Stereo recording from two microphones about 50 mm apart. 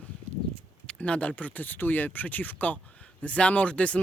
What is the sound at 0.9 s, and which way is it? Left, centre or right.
Speech, left.